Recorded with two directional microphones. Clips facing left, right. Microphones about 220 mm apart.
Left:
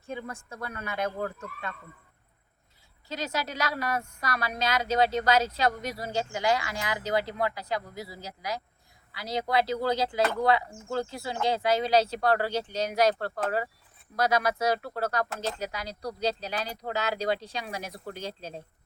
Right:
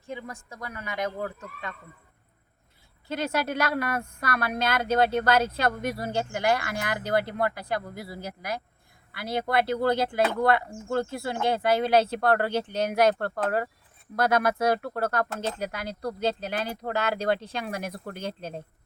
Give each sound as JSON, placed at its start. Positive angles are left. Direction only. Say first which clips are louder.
{"t": 0.1, "sound": "speech", "louder": "even", "side_deg": -15}
{"t": 3.1, "sound": "speech", "louder": "right 5 dB", "side_deg": -55}